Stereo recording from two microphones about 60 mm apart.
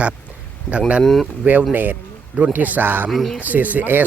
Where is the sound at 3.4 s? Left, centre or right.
Right.